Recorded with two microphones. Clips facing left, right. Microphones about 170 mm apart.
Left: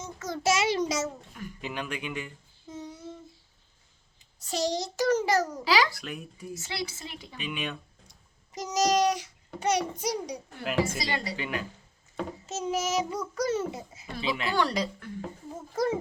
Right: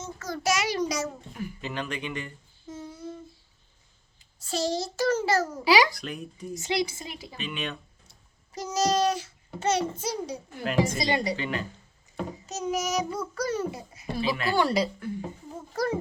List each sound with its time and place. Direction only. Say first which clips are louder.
0.0 s a child's voice: left 1 dB; 15° left (ahead or behind)
1.0 s speech: right 2 dB; 5° right (ahead or behind)
1.6 s a child's voice: even; 10° left (ahead or behind)
2.6 s child singing: right 2 dB; 20° left (ahead or behind)
4.2 s a child's voice: even; 20° left (ahead or behind)
5.5 s speech: right 4 dB; 5° right (ahead or behind)
5.9 s speech: right 2 dB; 5° left (ahead or behind)
6.6 s speech: right 9 dB; 15° right (ahead or behind)
7.3 s a child's voice: even; 10° left (ahead or behind)
10.9 s a woman's voice: right 6 dB; 20° right (ahead or behind)
11.3 s a child's voice: right 2 dB; 10° left (ahead or behind)
12.5 s a child's voice: even; 25° left (ahead or behind)
14.5 s speech: right 4 dB; 10° right (ahead or behind)